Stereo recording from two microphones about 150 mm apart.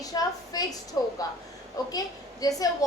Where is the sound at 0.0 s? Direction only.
25° left (ahead or behind).